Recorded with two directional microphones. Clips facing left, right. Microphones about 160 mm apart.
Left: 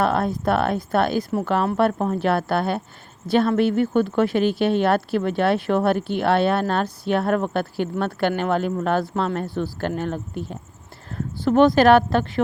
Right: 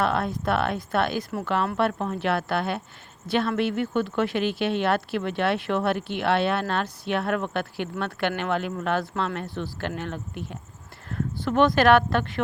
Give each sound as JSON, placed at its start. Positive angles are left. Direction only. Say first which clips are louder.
{"t": 0.0, "sound": "speech", "louder": "left 4 dB", "side_deg": 40}